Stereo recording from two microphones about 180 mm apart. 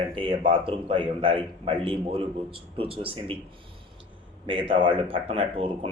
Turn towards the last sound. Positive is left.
turn(degrees=-30)  # may be behind; listen again after turning